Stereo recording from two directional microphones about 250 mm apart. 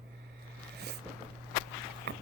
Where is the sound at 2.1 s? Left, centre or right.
Right.